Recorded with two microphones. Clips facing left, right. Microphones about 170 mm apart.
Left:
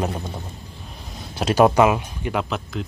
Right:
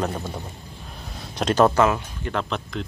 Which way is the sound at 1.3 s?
10° left (ahead or behind).